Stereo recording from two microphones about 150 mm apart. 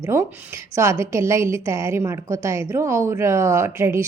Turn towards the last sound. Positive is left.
turn(degrees=-20)  # may be behind; listen again after turning